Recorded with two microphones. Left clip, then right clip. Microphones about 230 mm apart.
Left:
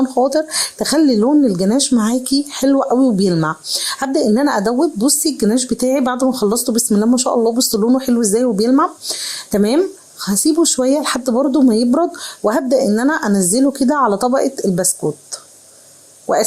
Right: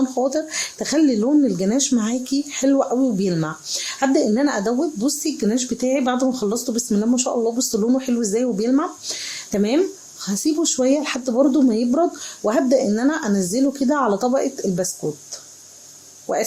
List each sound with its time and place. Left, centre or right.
0.1 s speech: centre